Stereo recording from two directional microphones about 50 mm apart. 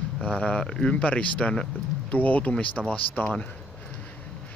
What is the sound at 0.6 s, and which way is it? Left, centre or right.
Speech, centre.